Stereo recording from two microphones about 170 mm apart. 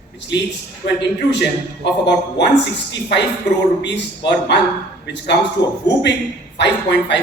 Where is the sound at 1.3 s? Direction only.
90° left.